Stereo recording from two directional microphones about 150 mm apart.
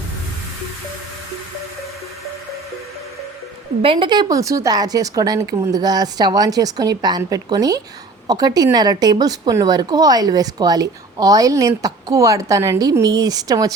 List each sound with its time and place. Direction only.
3.9 s a woman's voice: 30° right (ahead or behind)